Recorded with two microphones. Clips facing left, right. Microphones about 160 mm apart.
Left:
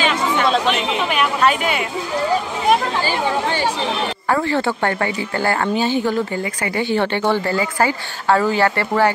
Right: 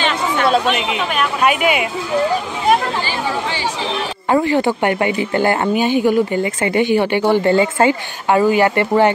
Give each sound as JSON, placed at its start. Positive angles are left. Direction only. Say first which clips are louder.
{"t": 1.4, "sound": "a woman's voice", "louder": "right 5 dB", "side_deg": -10}
{"t": 4.3, "sound": "a woman's voice", "louder": "right 5 dB", "side_deg": -15}